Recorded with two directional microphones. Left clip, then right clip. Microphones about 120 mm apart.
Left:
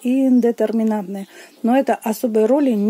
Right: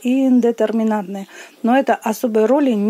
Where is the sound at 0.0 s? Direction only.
20° left (ahead or behind).